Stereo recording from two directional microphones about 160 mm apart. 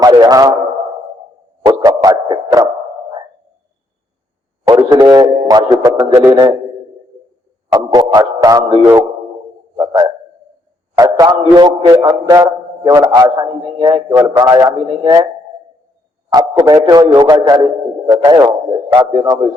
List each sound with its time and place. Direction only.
0.0 s a sound: 25° right (ahead or behind)
1.6 s music: 25° right (ahead or behind)
4.6 s a man's voice: 25° right (ahead or behind)
7.7 s a man's voice: 25° right (ahead or behind)
16.3 s a man's voice: 20° right (ahead or behind)